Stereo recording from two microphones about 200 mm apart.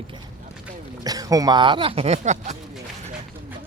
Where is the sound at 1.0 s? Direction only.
20° right (ahead or behind); by 2.6 s 35° right (ahead or behind).